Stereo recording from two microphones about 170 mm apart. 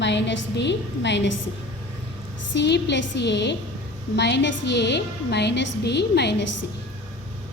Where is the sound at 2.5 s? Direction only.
90° left.